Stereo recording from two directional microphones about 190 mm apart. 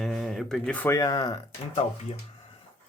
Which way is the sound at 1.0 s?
20° left (ahead or behind).